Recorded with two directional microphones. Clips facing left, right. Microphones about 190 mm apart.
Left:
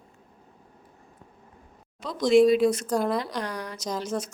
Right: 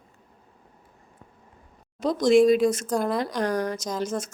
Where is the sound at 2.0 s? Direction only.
45° right (ahead or behind).